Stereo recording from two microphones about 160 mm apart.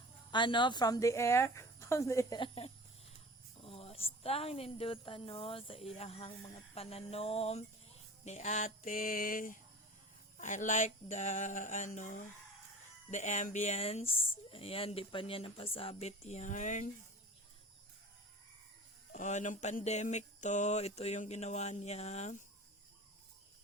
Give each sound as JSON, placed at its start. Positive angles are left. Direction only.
{"t": 0.3, "sound": "speech", "side_deg": 30}
{"t": 2.4, "sound": "speech", "side_deg": 35}
{"t": 10.3, "sound": "mantra", "side_deg": 50}
{"t": 13.1, "sound": "speech", "side_deg": 50}
{"t": 19.1, "sound": "mantra", "side_deg": 50}